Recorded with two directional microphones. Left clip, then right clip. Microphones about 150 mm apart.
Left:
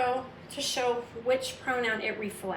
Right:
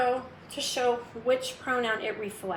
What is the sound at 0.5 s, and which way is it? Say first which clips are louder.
A woman's voice: right 2 dB; 25° right (ahead or behind).